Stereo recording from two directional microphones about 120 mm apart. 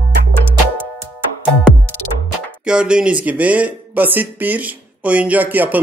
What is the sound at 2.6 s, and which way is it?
Speech, 10° right (ahead or behind).